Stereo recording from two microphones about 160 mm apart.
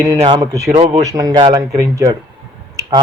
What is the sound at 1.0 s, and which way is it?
A man's voice, 20° right (ahead or behind).